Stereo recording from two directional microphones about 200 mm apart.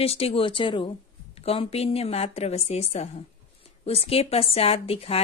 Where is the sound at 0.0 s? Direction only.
30° left (ahead or behind).